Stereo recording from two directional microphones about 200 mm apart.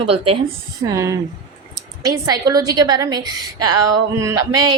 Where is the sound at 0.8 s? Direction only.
15° right (ahead or behind).